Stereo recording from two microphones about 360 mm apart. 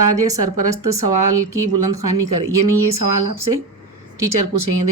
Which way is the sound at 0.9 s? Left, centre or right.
Right.